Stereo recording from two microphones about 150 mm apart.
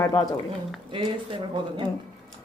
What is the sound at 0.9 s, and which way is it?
Speech, 35° right (ahead or behind).